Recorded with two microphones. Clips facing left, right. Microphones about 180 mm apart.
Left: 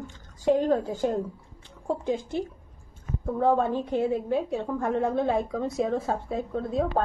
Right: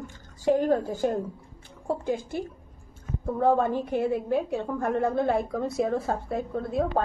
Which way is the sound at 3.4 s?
15° right (ahead or behind).